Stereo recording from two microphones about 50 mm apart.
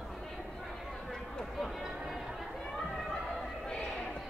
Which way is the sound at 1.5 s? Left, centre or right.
Centre.